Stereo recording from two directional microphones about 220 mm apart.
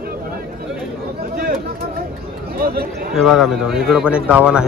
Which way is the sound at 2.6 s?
45° right (ahead or behind).